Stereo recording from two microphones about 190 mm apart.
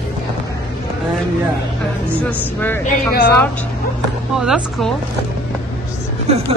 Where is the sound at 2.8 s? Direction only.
55° left (ahead or behind).